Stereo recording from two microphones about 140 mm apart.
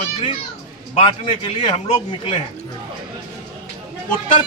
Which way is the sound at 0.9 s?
40° left (ahead or behind).